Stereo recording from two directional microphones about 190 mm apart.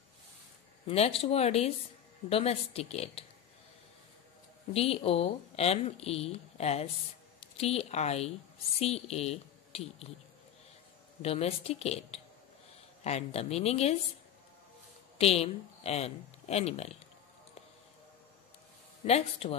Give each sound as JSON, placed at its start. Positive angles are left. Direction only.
{"t": 0.8, "sound": "speech", "side_deg": 30}
{"t": 4.7, "sound": "speech", "side_deg": 30}
{"t": 11.2, "sound": "speech", "side_deg": 30}
{"t": 15.1, "sound": "a woman's voice", "side_deg": 30}
{"t": 19.0, "sound": "speech", "side_deg": 35}